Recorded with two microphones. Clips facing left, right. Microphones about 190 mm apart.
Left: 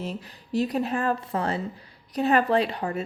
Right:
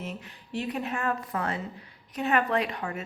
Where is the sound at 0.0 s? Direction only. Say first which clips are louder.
Left 4 dB; 35° left (ahead or behind).